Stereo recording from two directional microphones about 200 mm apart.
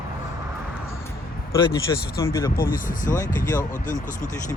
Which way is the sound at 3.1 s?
15° left (ahead or behind).